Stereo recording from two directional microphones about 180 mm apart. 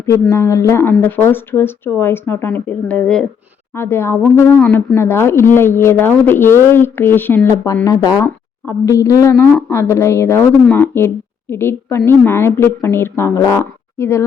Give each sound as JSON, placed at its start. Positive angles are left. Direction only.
{"t": 0.0, "sound": "a woman's voice", "side_deg": 15}